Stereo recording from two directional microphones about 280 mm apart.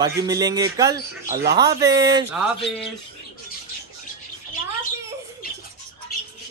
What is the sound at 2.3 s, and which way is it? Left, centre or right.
Speech, centre.